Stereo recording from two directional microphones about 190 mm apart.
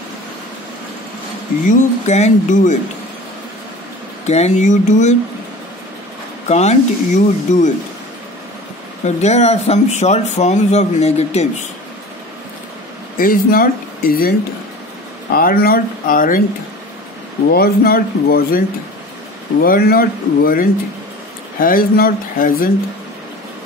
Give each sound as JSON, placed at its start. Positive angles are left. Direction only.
{"t": 1.7, "sound": "speech", "side_deg": 35}
{"t": 4.3, "sound": "speech", "side_deg": 35}
{"t": 6.5, "sound": "speech", "side_deg": 35}
{"t": 9.0, "sound": "speech", "side_deg": 35}
{"t": 13.2, "sound": "speech", "side_deg": 50}
{"t": 15.3, "sound": "speech", "side_deg": 50}
{"t": 17.5, "sound": "speech", "side_deg": 50}
{"t": 19.6, "sound": "speech", "side_deg": 50}